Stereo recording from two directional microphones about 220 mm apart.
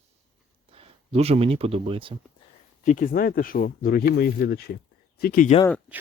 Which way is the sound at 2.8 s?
35° left (ahead or behind).